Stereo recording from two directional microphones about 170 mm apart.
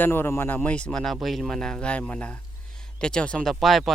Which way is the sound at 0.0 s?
15° left (ahead or behind).